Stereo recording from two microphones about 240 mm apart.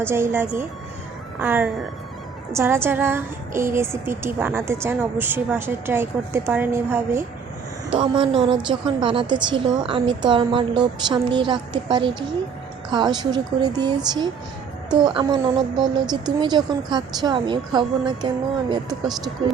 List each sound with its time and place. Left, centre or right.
0.0 s a woman's voice: centre